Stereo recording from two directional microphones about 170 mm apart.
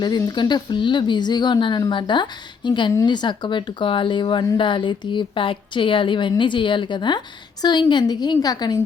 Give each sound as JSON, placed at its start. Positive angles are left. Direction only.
{"t": 0.0, "sound": "a woman's voice", "side_deg": 25}